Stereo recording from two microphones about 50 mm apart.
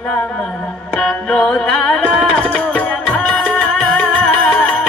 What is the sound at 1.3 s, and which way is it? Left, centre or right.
Music, left.